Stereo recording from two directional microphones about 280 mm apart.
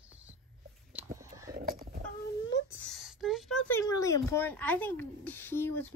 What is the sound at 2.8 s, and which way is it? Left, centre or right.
Speech, centre.